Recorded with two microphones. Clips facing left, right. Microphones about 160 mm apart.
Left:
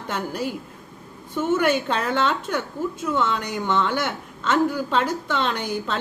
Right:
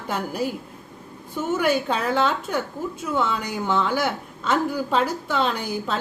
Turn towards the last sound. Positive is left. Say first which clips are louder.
# even
turn(degrees=-10)  # may be behind; listen again after turning